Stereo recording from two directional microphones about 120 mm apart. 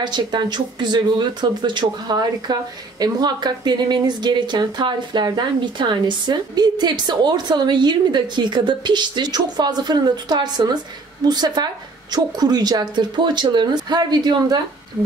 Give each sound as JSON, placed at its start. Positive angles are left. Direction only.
{"t": 0.0, "sound": "speech", "side_deg": -40}